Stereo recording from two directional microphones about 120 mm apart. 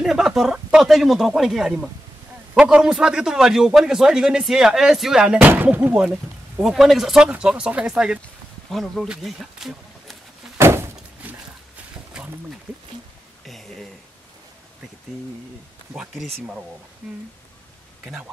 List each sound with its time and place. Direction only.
0.0 s a man's voice: 5° right (ahead or behind)
10.6 s thunk: 20° right (ahead or behind)
13.5 s speech: centre (ahead or behind)
15.9 s speech: 5° right (ahead or behind)